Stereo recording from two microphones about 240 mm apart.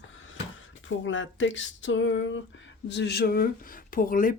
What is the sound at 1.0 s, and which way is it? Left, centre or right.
Speech, left.